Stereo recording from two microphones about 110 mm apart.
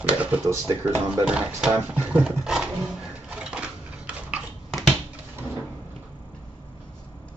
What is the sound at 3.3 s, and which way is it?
Crushing, 10° right (ahead or behind).